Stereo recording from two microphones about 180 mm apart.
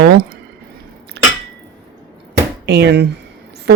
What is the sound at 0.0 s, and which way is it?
Speech, 60° right (ahead or behind).